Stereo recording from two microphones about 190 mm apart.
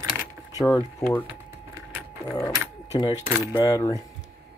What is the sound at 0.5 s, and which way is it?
Speech, 20° left (ahead or behind).